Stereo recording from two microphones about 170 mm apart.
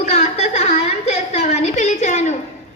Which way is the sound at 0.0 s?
40° left (ahead or behind).